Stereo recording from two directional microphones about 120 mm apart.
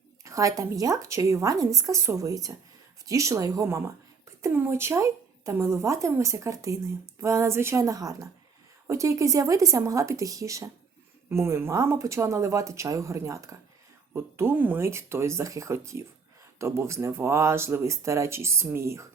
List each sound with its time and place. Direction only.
0.3 s a woman's voice: 25° right (ahead or behind)